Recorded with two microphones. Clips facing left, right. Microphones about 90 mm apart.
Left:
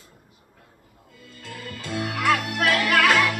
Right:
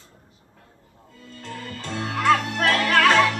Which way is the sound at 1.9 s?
30° right (ahead or behind).